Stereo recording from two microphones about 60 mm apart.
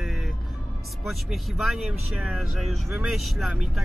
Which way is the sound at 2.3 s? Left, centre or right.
Centre.